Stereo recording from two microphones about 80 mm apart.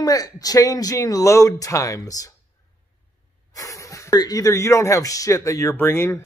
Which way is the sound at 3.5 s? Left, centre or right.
Left.